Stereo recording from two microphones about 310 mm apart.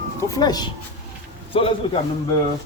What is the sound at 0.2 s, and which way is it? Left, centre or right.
A man's voice, centre.